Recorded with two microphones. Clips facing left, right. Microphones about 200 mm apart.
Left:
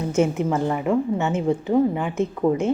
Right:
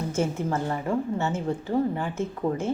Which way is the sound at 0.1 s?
70° left (ahead or behind).